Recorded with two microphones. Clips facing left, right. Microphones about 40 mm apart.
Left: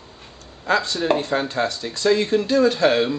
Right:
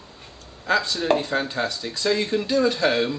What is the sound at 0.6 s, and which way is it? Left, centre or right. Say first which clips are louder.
Speech: left 1 dB; centre.